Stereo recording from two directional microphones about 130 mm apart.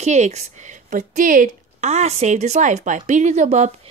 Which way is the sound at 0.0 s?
60° right (ahead or behind).